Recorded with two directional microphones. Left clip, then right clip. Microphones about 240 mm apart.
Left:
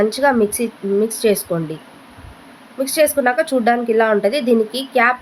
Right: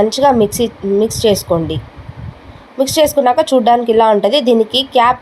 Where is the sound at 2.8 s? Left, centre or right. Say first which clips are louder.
Right 4 dB; centre.